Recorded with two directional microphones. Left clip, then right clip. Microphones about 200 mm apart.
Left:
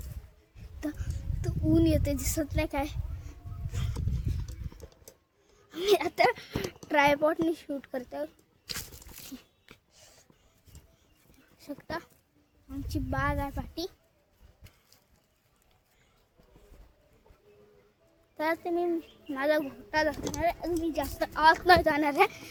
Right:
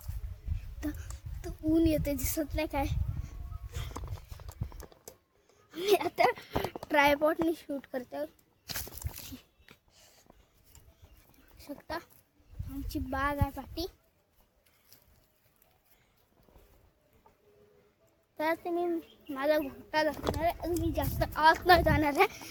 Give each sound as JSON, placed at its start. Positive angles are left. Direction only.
{"t": 0.8, "sound": "a sound", "side_deg": 0}
{"t": 5.6, "sound": "speech", "side_deg": 10}
{"t": 8.6, "sound": "a sound", "side_deg": -10}
{"t": 11.3, "sound": "dog", "side_deg": 5}
{"t": 12.7, "sound": "a child's voice", "side_deg": 0}
{"t": 18.3, "sound": "a child's voice", "side_deg": 5}